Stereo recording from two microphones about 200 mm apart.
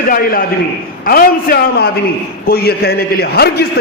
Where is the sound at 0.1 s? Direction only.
45° left (ahead or behind).